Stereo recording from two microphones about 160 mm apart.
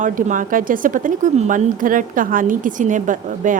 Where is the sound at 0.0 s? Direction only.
55° right (ahead or behind).